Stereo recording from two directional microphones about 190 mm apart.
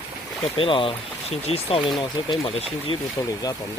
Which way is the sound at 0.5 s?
25° left (ahead or behind).